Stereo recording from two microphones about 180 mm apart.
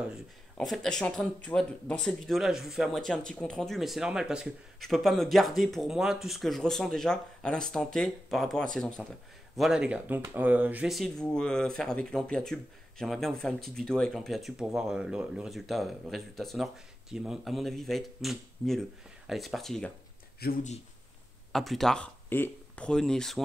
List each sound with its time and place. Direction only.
0.1 s speech: centre (ahead or behind)
20.4 s speech: 60° left (ahead or behind)
21.5 s speech: centre (ahead or behind)